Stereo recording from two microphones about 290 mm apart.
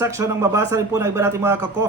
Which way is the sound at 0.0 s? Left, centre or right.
Centre.